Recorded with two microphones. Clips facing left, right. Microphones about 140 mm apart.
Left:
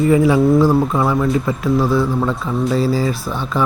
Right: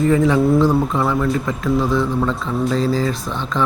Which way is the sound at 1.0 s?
15° left (ahead or behind).